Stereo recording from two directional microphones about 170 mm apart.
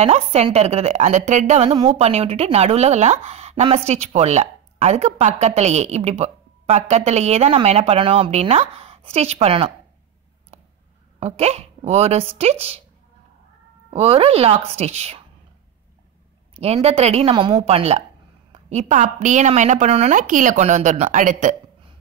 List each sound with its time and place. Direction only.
0.0 s speech: 40° right (ahead or behind)
11.1 s speech: 40° right (ahead or behind)
13.8 s speech: 35° right (ahead or behind)
16.5 s a woman's voice: 35° right (ahead or behind)